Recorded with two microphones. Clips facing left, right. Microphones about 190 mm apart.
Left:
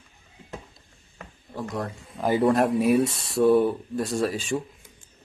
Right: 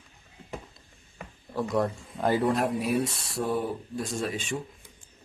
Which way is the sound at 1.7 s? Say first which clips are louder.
Right 6 dB; centre (ahead or behind).